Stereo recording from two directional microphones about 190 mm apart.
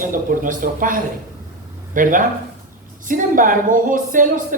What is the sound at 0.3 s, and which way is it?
Speech, 45° right (ahead or behind).